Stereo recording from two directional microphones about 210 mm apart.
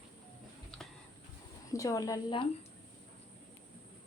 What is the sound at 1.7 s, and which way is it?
Speech, 15° left (ahead or behind).